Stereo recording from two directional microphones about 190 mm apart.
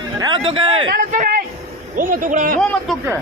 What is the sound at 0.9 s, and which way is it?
Speech, 45° right (ahead or behind).